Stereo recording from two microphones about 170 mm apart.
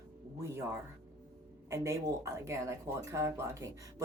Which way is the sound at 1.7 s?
15° right (ahead or behind).